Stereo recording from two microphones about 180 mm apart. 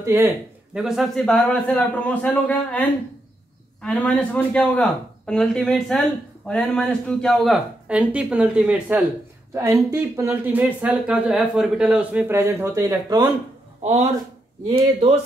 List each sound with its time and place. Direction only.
0.0 s speech: 15° right (ahead or behind)
0.7 s a man's voice: centre (ahead or behind)
3.8 s speech: 5° left (ahead or behind); by 13.3 s 20° right (ahead or behind)
13.8 s speech: 35° right (ahead or behind)